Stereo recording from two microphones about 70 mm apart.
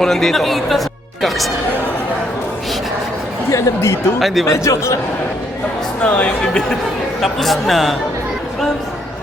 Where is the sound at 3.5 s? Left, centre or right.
Left.